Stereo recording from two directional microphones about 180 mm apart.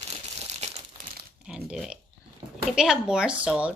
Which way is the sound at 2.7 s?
5° right (ahead or behind).